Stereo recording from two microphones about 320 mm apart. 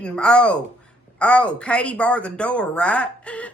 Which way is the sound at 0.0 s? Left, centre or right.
Centre.